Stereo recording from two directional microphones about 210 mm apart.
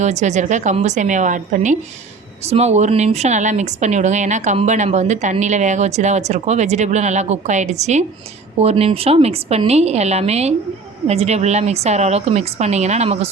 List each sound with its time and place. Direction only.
0.0 s a woman's voice: 35° right (ahead or behind)